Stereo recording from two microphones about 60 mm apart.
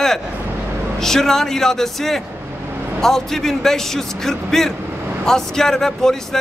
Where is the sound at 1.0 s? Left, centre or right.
Centre.